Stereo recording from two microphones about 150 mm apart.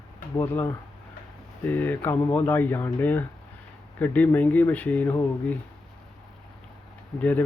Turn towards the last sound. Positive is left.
turn(degrees=10)  # may be behind; listen again after turning